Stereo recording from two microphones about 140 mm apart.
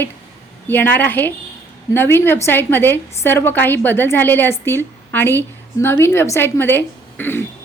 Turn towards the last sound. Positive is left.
turn(degrees=15)  # may be behind; listen again after turning